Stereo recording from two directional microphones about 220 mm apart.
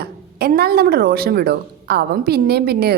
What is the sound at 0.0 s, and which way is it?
Speech, 45° right (ahead or behind).